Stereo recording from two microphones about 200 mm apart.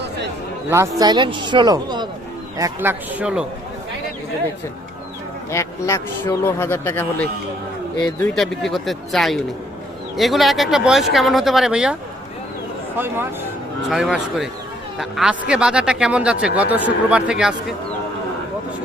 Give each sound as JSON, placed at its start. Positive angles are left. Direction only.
{"t": 0.7, "sound": "a man's voice", "side_deg": -15}
{"t": 3.2, "sound": "speech", "side_deg": -5}
{"t": 5.5, "sound": "speech", "side_deg": 15}
{"t": 7.9, "sound": "speech", "side_deg": 20}
{"t": 8.4, "sound": "speech", "side_deg": 0}
{"t": 13.8, "sound": "speech", "side_deg": 0}